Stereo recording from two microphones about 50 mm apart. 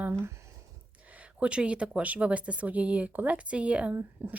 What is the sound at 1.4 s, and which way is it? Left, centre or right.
Speech, right.